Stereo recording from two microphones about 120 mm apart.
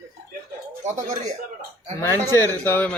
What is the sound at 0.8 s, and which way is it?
Speech, 75° right (ahead or behind).